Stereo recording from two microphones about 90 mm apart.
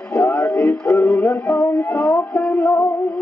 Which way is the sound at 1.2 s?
35° left (ahead or behind).